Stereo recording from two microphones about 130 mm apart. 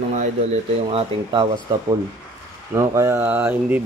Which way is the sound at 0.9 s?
40° right (ahead or behind).